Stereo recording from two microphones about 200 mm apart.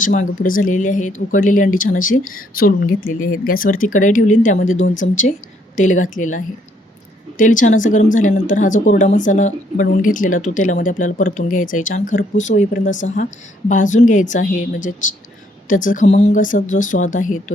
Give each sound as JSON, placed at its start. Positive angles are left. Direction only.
{"t": 0.0, "sound": "speech", "side_deg": 40}